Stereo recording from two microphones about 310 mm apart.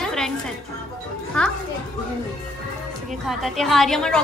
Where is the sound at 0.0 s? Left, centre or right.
Centre.